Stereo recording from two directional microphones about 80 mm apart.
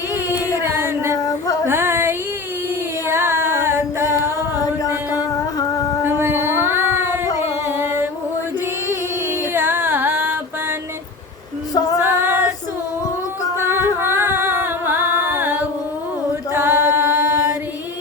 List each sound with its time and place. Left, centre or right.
0.6 s a sound: right
6.1 s a sound: right
7.3 s music: right
9.5 s music: right
12.0 s female singing: right
13.6 s music: right
16.5 s female singing: right